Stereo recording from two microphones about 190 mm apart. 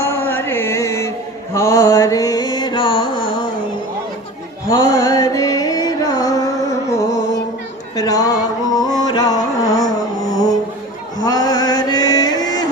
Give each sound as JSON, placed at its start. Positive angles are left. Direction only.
{"t": 0.0, "sound": "mantra", "side_deg": 10}
{"t": 1.5, "sound": "music", "side_deg": 15}
{"t": 4.7, "sound": "music", "side_deg": 15}
{"t": 11.2, "sound": "chant", "side_deg": 20}